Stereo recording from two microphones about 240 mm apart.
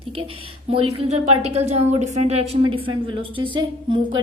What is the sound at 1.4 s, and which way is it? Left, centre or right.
A woman's voice, right.